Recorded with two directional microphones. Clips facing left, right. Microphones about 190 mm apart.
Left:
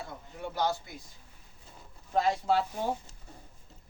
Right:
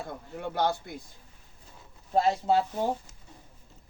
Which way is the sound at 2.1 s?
25° right (ahead or behind).